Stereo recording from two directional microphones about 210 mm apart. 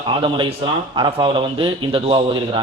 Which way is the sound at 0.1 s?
25° right (ahead or behind).